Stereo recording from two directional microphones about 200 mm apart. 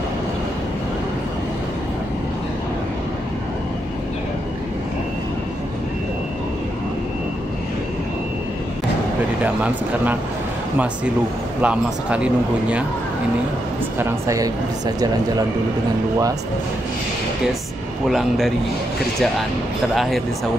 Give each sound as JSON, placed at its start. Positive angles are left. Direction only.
{"t": 9.4, "sound": "speech", "side_deg": -10}
{"t": 11.6, "sound": "speech", "side_deg": -5}
{"t": 13.9, "sound": "speech", "side_deg": -15}